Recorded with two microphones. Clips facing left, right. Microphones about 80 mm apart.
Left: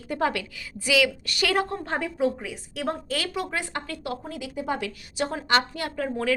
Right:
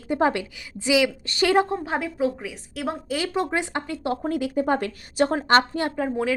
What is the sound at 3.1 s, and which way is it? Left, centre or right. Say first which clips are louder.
Speech: right 3 dB; right.